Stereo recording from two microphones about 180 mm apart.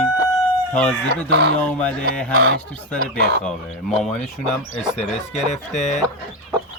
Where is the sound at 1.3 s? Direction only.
75° right (ahead or behind).